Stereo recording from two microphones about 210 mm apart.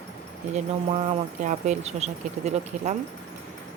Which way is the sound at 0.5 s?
30° right (ahead or behind).